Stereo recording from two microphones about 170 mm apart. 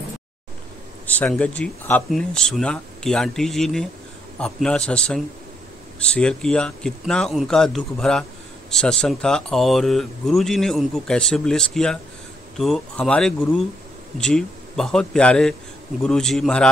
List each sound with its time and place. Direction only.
1.0 s speech: 10° left (ahead or behind)